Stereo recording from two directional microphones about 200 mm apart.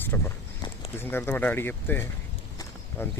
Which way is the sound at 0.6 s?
20° left (ahead or behind).